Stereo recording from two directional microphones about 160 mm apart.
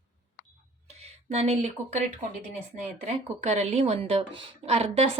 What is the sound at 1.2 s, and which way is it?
Speech, 40° right (ahead or behind).